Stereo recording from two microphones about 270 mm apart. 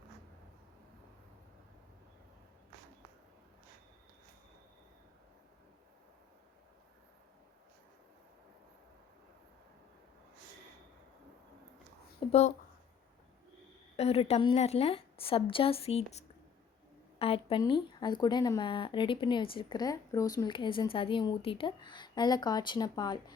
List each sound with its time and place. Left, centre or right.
12.3 s a woman's voice: left
13.9 s a woman's voice: left